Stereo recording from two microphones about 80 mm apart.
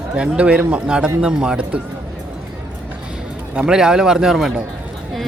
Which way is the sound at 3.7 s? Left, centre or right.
Centre.